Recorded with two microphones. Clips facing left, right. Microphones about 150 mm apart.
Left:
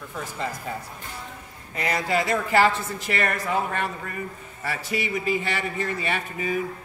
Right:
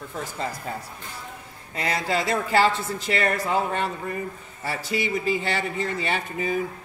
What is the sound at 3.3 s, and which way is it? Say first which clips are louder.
Speech: right 2 dB; 30° right (ahead or behind).